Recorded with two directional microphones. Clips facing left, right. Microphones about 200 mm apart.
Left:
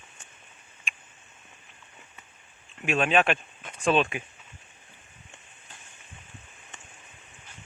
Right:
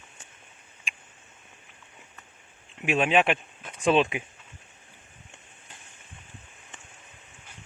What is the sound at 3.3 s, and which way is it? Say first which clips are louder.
Speech: right 1 dB; centre (ahead or behind).